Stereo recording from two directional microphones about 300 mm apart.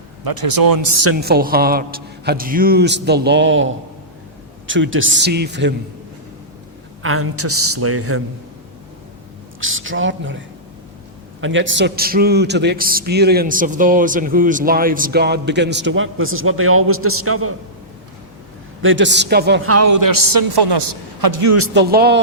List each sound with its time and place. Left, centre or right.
0.7 s speech: right
1.2 s a man's voice: right
7.0 s a man's voice: right
9.6 s a man's voice: right
18.8 s a man's voice: right
19.6 s a woman's voice: right
21.5 s a man's voice: right